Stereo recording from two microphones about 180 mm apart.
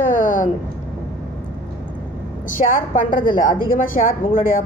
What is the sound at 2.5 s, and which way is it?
Speech, 50° left (ahead or behind).